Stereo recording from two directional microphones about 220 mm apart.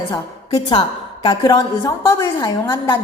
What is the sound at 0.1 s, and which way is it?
A woman's voice, 20° left (ahead or behind).